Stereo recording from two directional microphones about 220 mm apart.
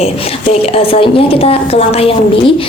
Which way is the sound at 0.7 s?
25° left (ahead or behind).